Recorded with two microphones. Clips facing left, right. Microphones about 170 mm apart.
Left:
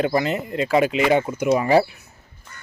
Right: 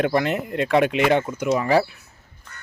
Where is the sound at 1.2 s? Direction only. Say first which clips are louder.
Left 2 dB; 15° left (ahead or behind).